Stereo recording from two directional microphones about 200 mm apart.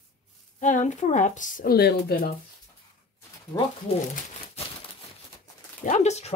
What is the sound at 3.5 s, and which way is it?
Speech, 20° left (ahead or behind).